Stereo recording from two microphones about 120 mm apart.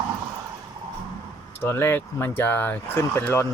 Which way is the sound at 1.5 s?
20° left (ahead or behind).